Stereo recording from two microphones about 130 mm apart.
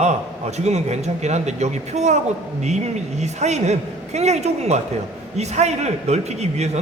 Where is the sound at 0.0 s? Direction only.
60° right (ahead or behind).